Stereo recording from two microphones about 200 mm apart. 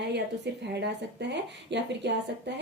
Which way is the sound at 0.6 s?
55° right (ahead or behind).